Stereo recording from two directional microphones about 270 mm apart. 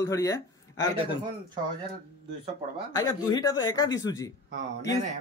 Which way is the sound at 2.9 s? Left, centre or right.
Centre.